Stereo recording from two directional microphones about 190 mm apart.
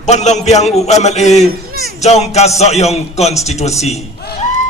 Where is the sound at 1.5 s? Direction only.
50° right (ahead or behind).